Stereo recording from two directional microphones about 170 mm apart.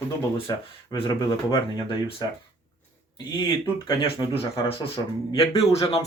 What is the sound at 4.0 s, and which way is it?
Speech, 30° left (ahead or behind).